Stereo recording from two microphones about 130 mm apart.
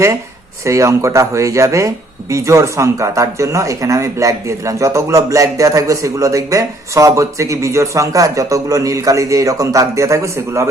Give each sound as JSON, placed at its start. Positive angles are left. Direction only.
{"t": 0.6, "sound": "speech", "side_deg": -20}